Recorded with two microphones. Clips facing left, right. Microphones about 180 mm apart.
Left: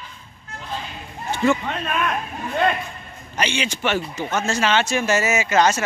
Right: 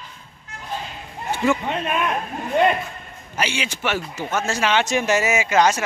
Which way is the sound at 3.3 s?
5° right (ahead or behind).